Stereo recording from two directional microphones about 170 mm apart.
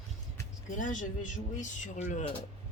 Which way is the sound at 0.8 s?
50° left (ahead or behind).